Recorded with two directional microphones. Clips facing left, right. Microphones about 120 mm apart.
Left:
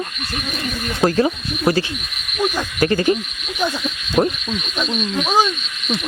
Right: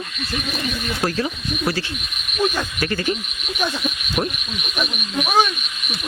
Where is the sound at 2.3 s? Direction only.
15° left (ahead or behind).